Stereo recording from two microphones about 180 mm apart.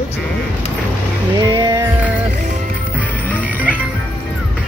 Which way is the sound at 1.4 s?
25° right (ahead or behind).